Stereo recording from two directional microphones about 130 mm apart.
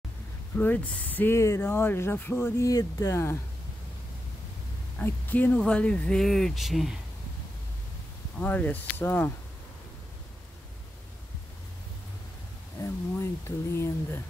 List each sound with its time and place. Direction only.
0.6 s speech: 10° left (ahead or behind)
4.9 s speech: 15° left (ahead or behind)
8.4 s speech: 10° left (ahead or behind)
12.8 s speech: 20° left (ahead or behind)